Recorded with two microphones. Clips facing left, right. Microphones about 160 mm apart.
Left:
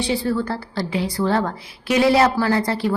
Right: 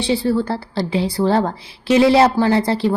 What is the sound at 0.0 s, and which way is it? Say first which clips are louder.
A woman's voice: right 3 dB; 30° right (ahead or behind).